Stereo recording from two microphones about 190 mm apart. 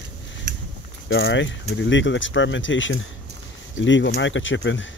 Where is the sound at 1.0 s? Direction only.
80° left.